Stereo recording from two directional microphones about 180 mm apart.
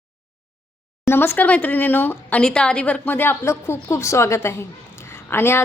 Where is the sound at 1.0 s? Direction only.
15° left (ahead or behind).